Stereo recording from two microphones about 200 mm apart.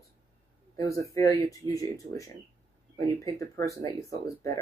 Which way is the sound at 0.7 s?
15° left (ahead or behind).